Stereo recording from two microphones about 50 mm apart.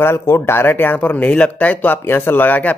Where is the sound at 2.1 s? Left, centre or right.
Left.